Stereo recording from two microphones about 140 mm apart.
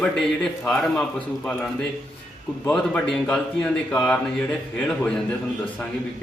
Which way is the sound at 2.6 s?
10° left (ahead or behind).